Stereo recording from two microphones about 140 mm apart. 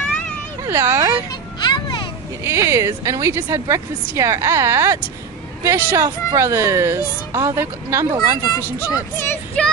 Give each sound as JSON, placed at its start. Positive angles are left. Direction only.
{"t": 0.7, "sound": "speech", "side_deg": -20}
{"t": 1.6, "sound": "a sound", "side_deg": 30}
{"t": 2.4, "sound": "a child's voice", "side_deg": -20}
{"t": 9.6, "sound": "child singing", "side_deg": 5}